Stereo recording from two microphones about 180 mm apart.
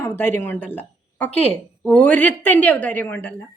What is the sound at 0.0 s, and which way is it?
A woman's voice, 10° left (ahead or behind).